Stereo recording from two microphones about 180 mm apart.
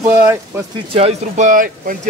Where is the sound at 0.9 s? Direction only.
40° right (ahead or behind).